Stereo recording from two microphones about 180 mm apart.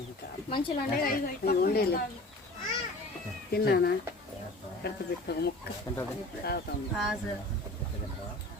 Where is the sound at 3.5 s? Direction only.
60° left (ahead or behind).